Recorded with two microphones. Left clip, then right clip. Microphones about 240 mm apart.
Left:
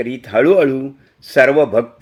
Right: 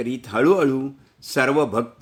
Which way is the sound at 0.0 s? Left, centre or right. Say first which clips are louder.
Left 6 dB; right.